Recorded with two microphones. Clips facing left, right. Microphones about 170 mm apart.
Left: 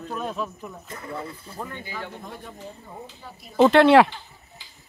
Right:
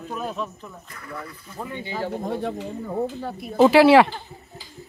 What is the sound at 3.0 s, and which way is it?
Speech, 60° right (ahead or behind).